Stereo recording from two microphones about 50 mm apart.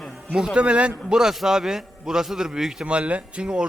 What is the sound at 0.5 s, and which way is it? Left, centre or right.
Speech, right.